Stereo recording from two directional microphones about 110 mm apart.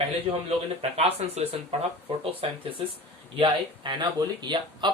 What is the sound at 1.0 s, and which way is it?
Speech, 70° right (ahead or behind).